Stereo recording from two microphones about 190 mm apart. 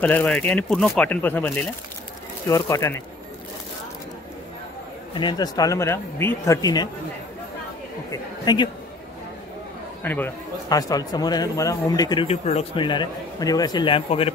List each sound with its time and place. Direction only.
0.0 s speech: 10° left (ahead or behind)
2.5 s speech: 15° left (ahead or behind)
5.1 s speech: 25° left (ahead or behind)
8.1 s speech: 20° left (ahead or behind)
10.0 s speech: 10° left (ahead or behind); by 14.3 s 30° left (ahead or behind)